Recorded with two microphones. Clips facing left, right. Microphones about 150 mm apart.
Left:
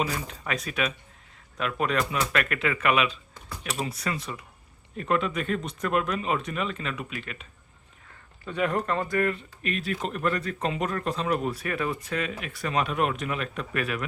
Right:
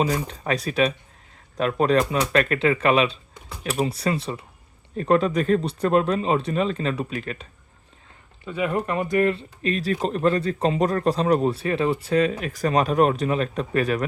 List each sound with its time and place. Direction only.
0.0 s speech: 35° right (ahead or behind)
8.4 s speech: 5° right (ahead or behind); by 14.0 s 35° right (ahead or behind)